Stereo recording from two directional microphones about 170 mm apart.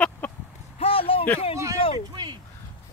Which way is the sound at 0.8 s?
35° left (ahead or behind).